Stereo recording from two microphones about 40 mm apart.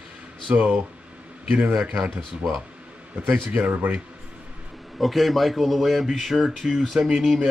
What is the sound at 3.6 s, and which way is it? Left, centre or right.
Speech, right.